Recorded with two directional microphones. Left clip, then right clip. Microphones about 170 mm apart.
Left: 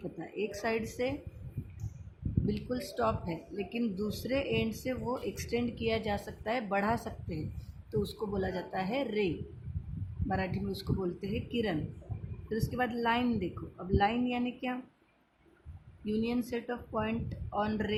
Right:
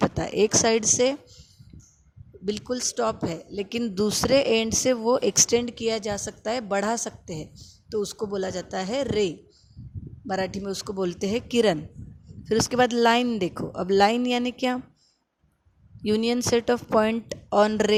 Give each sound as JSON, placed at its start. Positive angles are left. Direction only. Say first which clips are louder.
{"t": 0.2, "sound": "speech", "louder": "right 12 dB", "side_deg": -60}
{"t": 2.5, "sound": "a woman's voice", "louder": "right 11 dB", "side_deg": -50}
{"t": 16.0, "sound": "speech", "louder": "right 11 dB", "side_deg": -60}